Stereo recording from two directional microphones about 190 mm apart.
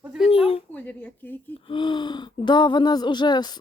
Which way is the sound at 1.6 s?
25° left (ahead or behind).